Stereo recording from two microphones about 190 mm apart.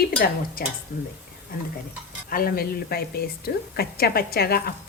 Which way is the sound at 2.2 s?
50° left (ahead or behind).